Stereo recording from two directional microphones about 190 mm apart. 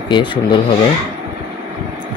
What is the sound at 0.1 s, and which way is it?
Speech, 25° left (ahead or behind).